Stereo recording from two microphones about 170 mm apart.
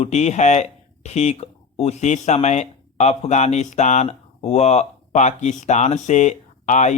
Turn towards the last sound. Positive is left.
turn(degrees=45)  # may be behind; listen again after turning